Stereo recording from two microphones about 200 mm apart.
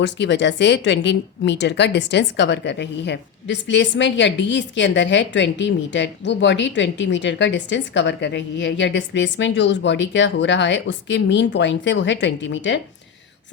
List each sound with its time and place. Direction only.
0.0 s speech: 60° left (ahead or behind)